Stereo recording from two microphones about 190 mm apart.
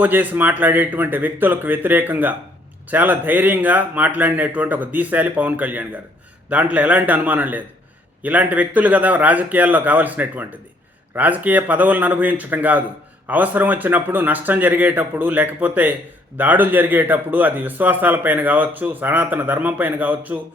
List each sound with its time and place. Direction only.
0.0 s a man's voice: 10° right (ahead or behind)